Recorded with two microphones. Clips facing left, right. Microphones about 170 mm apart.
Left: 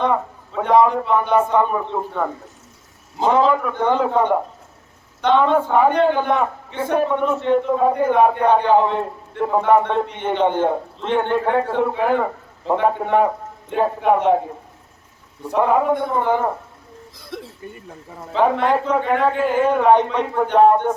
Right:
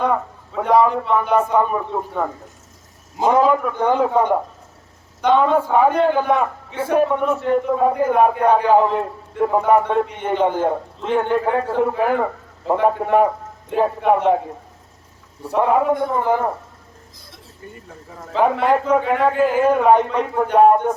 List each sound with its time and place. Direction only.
0.5 s a man's voice: 5° right (ahead or behind)
15.4 s a man's voice: centre (ahead or behind)
17.3 s speech: 60° left (ahead or behind)
18.3 s a man's voice: 5° right (ahead or behind)